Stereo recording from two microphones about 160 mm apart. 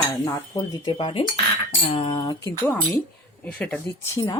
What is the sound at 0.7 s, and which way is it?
Speech, 30° left (ahead or behind).